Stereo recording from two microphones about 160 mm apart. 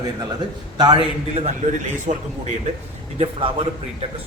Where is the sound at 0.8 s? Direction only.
30° right (ahead or behind).